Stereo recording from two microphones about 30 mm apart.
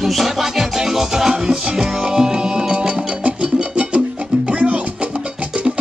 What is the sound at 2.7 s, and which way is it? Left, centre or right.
Music, right.